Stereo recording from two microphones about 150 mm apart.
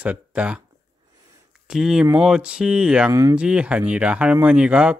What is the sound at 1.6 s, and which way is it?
Speech, 5° right (ahead or behind).